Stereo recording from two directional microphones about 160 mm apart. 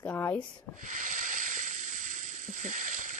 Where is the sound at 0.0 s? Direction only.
10° left (ahead or behind).